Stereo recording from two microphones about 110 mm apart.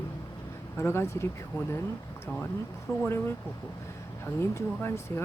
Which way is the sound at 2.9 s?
25° left (ahead or behind).